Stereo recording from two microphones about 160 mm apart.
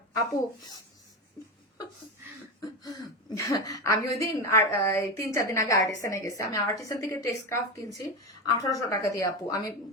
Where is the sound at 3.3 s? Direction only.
20° left (ahead or behind).